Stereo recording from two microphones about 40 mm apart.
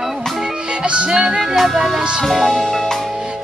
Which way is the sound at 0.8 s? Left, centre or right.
Right.